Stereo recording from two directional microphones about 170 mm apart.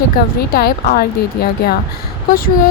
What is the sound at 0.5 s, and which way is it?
Speech, 65° left (ahead or behind).